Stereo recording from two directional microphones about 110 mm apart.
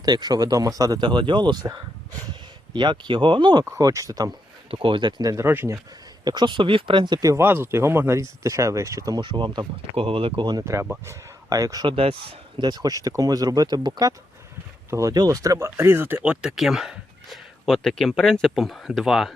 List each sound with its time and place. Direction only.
0.0 s speech: 40° right (ahead or behind)
3.7 s speech: 30° right (ahead or behind)
4.7 s speech: 50° right (ahead or behind); by 5.5 s 35° right (ahead or behind)
5.5 s speech: 25° right (ahead or behind)
6.2 s speech: 40° right (ahead or behind)
7.4 s speech: 20° right (ahead or behind)
9.2 s speech: 45° right (ahead or behind)
9.9 s speech: 60° right (ahead or behind)
11.0 s speech: 25° right (ahead or behind)
11.9 s speech: 60° right (ahead or behind)
12.5 s speech: 40° right (ahead or behind); by 19.3 s centre (ahead or behind)